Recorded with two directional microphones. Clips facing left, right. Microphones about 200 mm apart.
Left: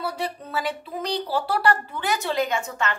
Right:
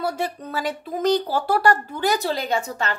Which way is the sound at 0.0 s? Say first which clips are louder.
Right 3 dB; 45° right (ahead or behind).